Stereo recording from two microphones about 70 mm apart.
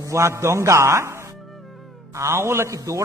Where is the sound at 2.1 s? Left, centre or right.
Right.